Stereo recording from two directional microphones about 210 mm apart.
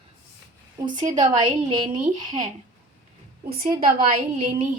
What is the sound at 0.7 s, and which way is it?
Speech, 20° right (ahead or behind).